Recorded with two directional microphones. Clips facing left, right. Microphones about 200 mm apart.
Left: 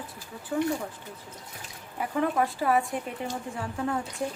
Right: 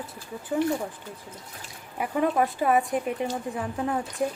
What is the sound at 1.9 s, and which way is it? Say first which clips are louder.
A woman's voice: right 2 dB; 20° right (ahead or behind).